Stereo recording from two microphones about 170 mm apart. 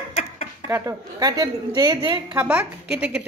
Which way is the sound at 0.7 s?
20° right (ahead or behind).